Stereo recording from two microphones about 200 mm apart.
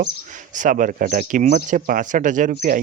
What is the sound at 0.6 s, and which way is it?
Speech, 40° right (ahead or behind).